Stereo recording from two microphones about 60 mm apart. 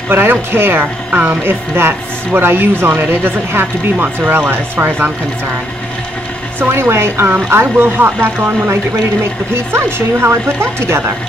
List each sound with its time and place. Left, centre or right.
0.1 s speech: right
1.1 s speech: right
6.7 s speech: right